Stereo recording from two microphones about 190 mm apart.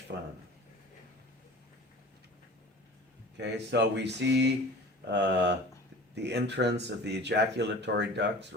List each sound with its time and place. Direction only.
0.1 s speech: 60° right (ahead or behind)
3.3 s speech: 65° right (ahead or behind)